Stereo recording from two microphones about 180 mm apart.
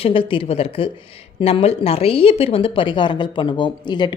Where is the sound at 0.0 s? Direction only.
30° left (ahead or behind).